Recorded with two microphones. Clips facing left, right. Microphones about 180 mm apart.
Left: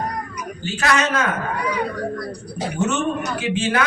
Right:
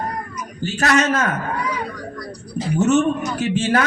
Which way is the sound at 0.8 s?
40° right (ahead or behind).